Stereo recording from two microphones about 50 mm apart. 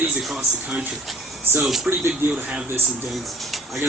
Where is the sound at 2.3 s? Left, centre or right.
Right.